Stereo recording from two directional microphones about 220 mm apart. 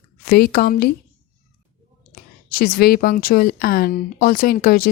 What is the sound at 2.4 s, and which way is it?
Speech, 40° left (ahead or behind).